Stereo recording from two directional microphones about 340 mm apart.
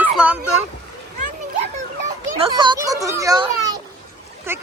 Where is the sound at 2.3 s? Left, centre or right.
Centre.